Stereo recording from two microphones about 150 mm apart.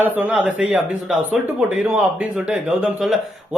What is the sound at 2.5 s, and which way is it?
Speech, 5° right (ahead or behind).